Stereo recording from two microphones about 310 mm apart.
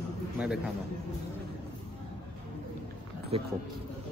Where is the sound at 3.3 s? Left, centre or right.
Centre.